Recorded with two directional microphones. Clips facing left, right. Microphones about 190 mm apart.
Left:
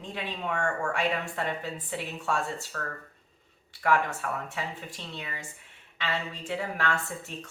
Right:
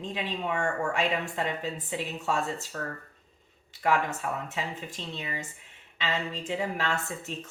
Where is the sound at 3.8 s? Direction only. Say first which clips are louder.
Even; 20° right (ahead or behind).